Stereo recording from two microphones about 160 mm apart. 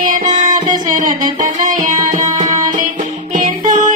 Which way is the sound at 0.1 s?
55° right (ahead or behind).